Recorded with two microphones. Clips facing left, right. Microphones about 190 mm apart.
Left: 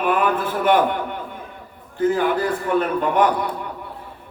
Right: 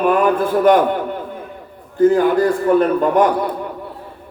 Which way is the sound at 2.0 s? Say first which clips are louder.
Right 6 dB; 40° right (ahead or behind).